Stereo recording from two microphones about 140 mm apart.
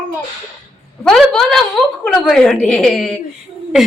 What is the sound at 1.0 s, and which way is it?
A woman's voice, 5° left (ahead or behind).